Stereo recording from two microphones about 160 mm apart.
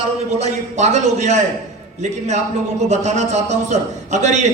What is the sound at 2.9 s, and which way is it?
A man's voice, 45° right (ahead or behind).